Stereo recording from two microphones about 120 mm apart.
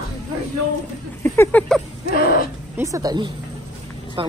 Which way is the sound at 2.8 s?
30° right (ahead or behind).